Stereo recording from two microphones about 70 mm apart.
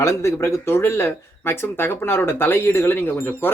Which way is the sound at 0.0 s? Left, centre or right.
Left.